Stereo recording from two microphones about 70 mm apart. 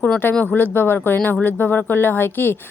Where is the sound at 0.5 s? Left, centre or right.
Left.